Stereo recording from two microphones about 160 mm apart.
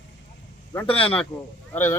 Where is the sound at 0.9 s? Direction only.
35° left (ahead or behind).